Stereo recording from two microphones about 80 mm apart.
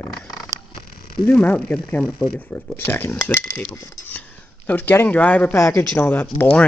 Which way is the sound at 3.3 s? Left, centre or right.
Left.